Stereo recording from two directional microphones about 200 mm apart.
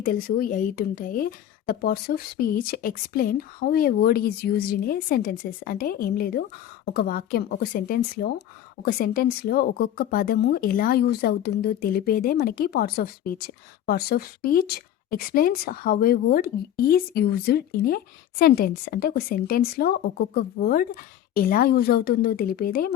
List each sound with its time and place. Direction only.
0.0 s speech: 45° left (ahead or behind)